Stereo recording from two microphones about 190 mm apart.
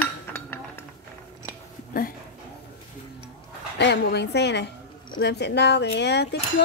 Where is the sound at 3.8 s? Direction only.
60° left (ahead or behind).